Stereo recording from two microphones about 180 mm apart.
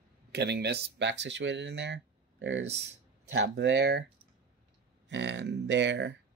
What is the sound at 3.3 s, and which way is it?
Speech, 75° right (ahead or behind).